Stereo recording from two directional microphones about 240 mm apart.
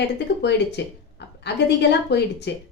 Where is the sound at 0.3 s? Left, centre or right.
Left.